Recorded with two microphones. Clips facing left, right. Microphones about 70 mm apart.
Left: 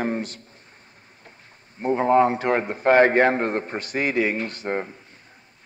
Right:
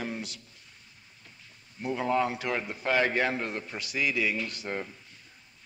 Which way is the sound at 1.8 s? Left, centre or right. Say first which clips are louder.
Left 10 dB; left.